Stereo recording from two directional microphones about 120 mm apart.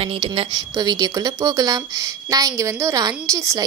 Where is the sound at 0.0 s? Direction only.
45° right (ahead or behind).